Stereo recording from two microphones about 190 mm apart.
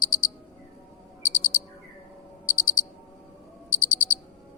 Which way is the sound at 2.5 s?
90° left.